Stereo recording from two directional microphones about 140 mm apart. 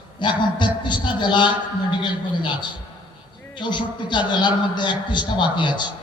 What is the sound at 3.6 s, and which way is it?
A man's voice, 35° left (ahead or behind).